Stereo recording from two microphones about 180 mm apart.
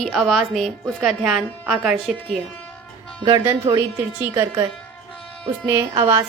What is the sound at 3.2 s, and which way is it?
Speech, 20° right (ahead or behind).